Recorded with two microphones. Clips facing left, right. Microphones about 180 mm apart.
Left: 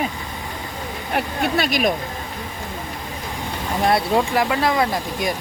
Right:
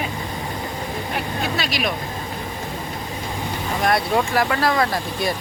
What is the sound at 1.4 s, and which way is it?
Speech, 55° left (ahead or behind).